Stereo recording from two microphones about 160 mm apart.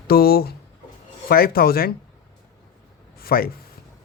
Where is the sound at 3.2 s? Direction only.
65° left (ahead or behind).